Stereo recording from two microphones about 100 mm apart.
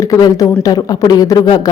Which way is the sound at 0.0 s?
35° left (ahead or behind).